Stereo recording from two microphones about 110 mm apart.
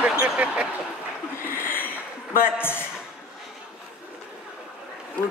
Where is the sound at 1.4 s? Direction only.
20° left (ahead or behind).